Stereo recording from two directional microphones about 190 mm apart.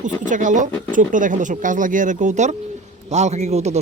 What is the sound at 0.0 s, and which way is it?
Speech, 40° right (ahead or behind).